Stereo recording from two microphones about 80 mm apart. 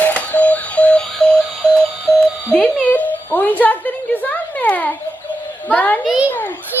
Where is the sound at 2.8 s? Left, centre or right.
Left.